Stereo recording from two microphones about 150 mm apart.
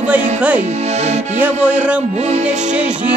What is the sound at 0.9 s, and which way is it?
Music, 45° right (ahead or behind).